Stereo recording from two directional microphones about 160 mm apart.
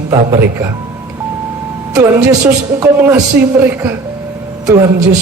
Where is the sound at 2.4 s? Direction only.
15° right (ahead or behind).